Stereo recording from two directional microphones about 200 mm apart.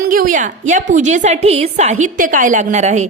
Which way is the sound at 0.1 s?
45° right (ahead or behind).